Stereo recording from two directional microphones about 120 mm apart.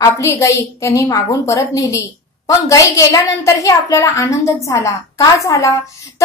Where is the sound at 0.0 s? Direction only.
25° left (ahead or behind).